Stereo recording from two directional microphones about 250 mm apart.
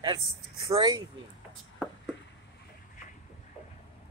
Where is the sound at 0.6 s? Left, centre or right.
Centre.